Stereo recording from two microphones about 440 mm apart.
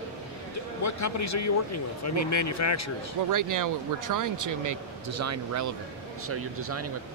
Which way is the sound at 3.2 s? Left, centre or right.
Right.